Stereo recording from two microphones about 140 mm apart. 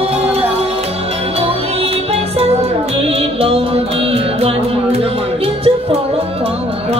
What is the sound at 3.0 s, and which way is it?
Music, 45° right (ahead or behind).